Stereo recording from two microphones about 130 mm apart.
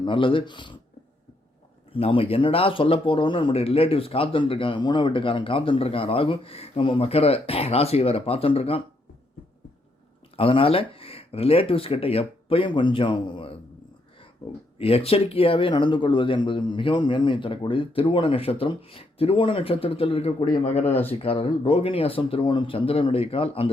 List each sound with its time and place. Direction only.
0.0 s speech: 40° left (ahead or behind)
1.9 s speech: 45° left (ahead or behind)
10.3 s speech: 45° left (ahead or behind)
14.8 s speech: 50° left (ahead or behind)
20.4 s speech: 90° left
20.7 s speech: 55° left (ahead or behind)